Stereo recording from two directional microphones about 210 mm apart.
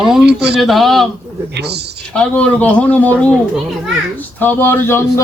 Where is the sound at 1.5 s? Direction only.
50° right (ahead or behind).